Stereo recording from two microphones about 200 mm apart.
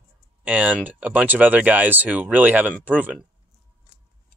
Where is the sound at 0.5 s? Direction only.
10° right (ahead or behind).